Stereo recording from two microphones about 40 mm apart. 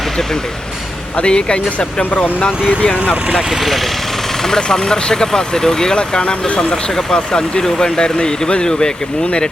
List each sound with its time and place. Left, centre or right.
1.1 s speech: left
3.5 s speech: centre
4.4 s speech: centre